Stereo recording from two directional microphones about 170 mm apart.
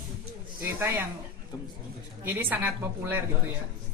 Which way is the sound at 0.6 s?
15° right (ahead or behind).